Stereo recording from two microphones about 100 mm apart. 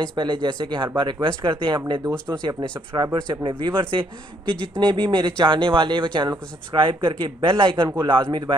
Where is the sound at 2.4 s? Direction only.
50° right (ahead or behind).